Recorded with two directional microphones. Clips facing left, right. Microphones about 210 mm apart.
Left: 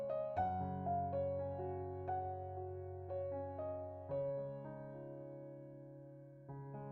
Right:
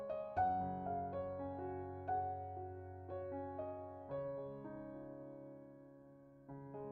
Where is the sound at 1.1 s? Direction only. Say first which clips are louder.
Left 4 dB; centre (ahead or behind).